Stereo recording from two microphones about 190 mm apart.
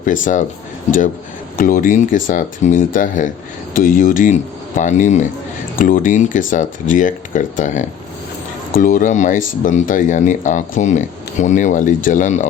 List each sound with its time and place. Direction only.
0.0 s a man's voice: 40° left (ahead or behind)